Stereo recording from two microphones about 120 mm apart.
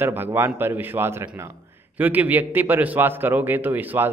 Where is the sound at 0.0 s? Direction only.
20° right (ahead or behind).